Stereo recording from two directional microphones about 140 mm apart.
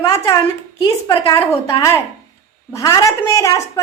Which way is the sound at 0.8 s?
30° left (ahead or behind).